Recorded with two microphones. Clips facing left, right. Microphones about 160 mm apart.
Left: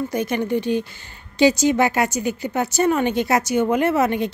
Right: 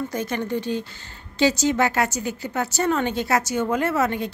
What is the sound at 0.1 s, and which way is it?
A woman's voice, 15° left (ahead or behind).